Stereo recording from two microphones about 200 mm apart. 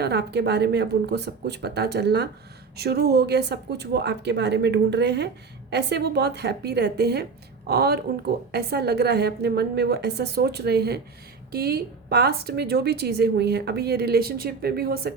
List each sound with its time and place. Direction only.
0.0 s a woman's voice: 55° right (ahead or behind)